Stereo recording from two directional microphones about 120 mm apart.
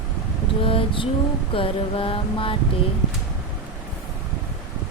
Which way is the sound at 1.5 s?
50° left (ahead or behind).